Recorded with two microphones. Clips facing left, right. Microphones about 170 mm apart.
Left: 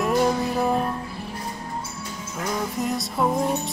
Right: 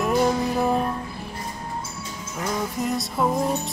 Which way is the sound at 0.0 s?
Centre (ahead or behind).